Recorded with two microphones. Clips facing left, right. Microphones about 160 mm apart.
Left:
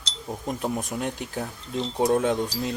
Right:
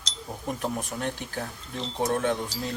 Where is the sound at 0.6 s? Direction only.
15° left (ahead or behind).